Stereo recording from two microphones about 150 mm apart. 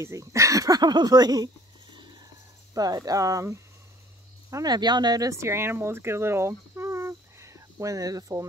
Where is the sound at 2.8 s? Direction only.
25° right (ahead or behind).